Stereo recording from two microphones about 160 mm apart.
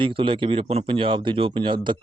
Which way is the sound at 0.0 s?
35° right (ahead or behind).